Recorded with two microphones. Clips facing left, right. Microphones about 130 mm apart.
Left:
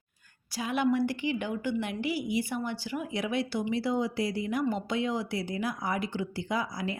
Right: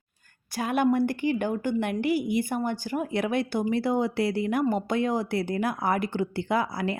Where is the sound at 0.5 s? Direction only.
50° right (ahead or behind).